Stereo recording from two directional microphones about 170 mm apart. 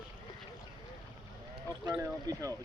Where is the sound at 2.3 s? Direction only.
20° right (ahead or behind).